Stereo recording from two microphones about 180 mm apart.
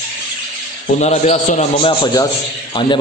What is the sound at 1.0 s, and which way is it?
Speech, 40° left (ahead or behind).